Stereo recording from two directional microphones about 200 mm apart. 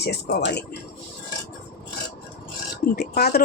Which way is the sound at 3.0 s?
50° left (ahead or behind).